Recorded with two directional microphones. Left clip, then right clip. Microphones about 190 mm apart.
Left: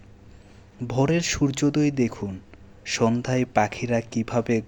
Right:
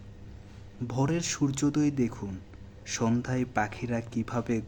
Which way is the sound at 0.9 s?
20° left (ahead or behind).